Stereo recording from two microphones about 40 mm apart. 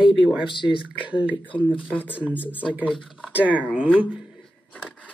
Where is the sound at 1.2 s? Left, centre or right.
Right.